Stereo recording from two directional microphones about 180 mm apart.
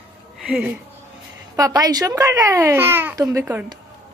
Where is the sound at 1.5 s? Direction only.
20° right (ahead or behind).